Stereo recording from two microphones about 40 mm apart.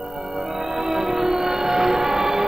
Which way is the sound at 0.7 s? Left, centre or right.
Centre.